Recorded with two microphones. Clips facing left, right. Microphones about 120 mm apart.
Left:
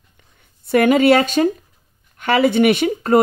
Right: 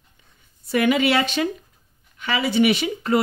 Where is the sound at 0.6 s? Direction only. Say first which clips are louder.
Left 6 dB; 50° left (ahead or behind).